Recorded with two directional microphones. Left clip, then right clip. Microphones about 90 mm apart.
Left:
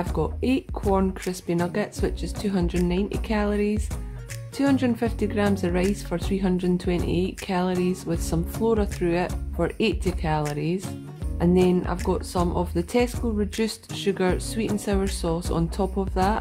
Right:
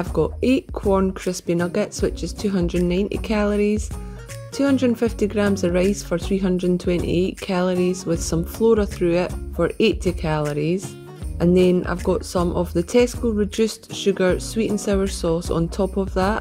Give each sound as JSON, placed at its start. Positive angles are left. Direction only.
{"t": 0.0, "sound": "speech", "side_deg": -35}